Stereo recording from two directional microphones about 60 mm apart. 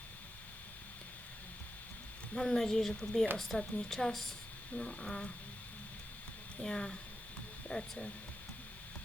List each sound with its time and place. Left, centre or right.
2.3 s speech: centre
4.7 s speech: centre
6.6 s speech: centre